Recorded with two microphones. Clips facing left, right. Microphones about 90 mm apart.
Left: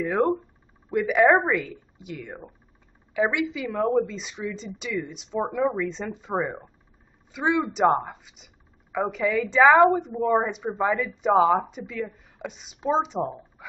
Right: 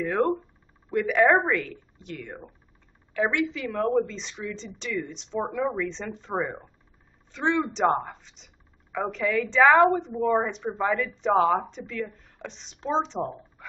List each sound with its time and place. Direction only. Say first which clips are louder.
0.0 s a woman's voice: left 1 dB; 10° left (ahead or behind)